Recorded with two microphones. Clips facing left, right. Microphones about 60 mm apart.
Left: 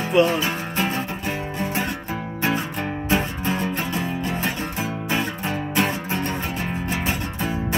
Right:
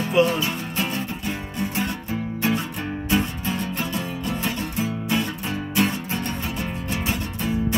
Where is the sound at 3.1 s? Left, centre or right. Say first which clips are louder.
Left 1 dB; left.